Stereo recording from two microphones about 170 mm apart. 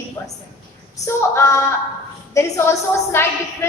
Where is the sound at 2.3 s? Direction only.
20° left (ahead or behind).